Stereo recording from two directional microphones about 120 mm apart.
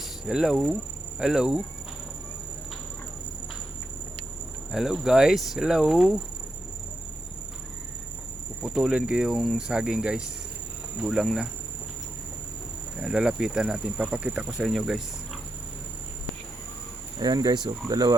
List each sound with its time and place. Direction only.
0.0 s speech: 5° right (ahead or behind)
4.7 s speech: 5° right (ahead or behind)
8.6 s speech: 5° right (ahead or behind)
13.0 s speech: 5° right (ahead or behind)
17.2 s speech: 35° right (ahead or behind)